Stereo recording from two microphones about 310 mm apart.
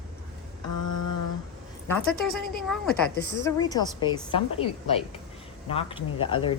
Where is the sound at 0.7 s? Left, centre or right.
Left.